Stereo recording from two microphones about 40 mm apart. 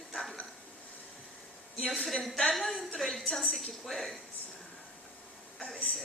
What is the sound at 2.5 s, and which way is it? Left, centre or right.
Speech, centre.